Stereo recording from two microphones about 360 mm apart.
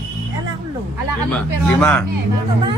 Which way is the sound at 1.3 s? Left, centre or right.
Centre.